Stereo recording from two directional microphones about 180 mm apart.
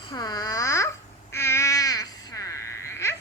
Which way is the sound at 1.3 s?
15° left (ahead or behind).